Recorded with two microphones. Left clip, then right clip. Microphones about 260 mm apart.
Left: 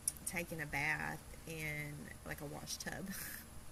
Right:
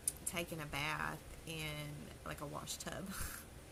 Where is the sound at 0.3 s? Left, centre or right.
Right.